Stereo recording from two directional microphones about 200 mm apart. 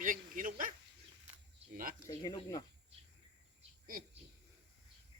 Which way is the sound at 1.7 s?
45° right (ahead or behind).